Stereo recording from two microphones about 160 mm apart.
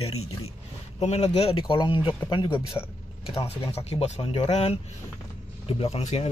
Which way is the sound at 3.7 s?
40° left (ahead or behind).